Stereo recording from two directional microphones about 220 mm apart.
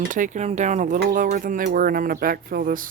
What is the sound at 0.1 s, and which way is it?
Speech, 35° right (ahead or behind).